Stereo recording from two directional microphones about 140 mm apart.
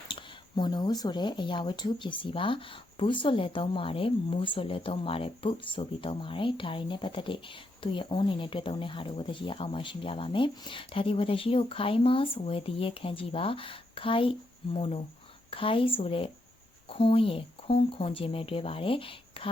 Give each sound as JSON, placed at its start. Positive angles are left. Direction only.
{"t": 0.1, "sound": "a woman's voice", "side_deg": 30}